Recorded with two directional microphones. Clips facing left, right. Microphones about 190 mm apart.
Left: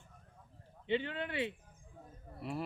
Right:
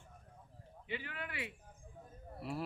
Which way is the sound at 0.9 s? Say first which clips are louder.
Left 9 dB; 25° left (ahead or behind).